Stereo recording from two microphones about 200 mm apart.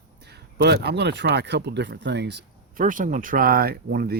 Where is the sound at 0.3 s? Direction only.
55° right (ahead or behind).